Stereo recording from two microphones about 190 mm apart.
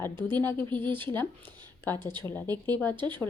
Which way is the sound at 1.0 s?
10° left (ahead or behind).